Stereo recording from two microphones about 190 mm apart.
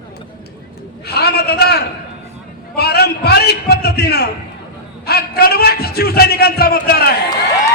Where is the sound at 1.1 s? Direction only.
55° left (ahead or behind).